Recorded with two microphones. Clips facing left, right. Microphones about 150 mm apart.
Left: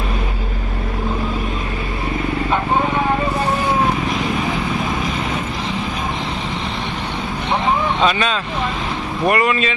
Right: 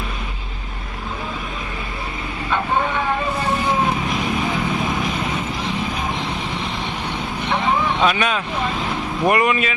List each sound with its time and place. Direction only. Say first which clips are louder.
8.0 s speech: left 1 dB; 10° right (ahead or behind)